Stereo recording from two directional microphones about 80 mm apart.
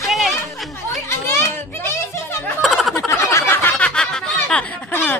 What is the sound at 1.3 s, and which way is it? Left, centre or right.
Children playing, left.